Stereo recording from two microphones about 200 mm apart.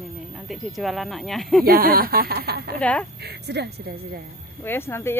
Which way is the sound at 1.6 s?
45° right (ahead or behind).